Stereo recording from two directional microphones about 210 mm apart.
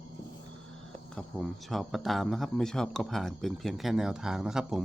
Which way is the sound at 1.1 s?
Centre (ahead or behind).